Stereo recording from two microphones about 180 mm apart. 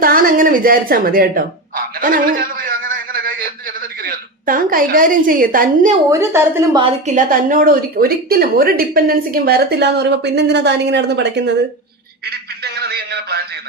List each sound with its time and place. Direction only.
0.0 s a woman's voice: 50° right (ahead or behind)
6.1 s a woman's voice: 15° right (ahead or behind)
6.8 s speech: 45° right (ahead or behind); by 11.5 s 70° right (ahead or behind)
12.2 s a sound: 60° right (ahead or behind)